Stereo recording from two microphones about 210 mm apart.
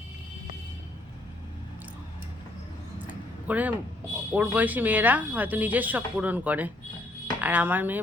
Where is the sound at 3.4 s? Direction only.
5° right (ahead or behind).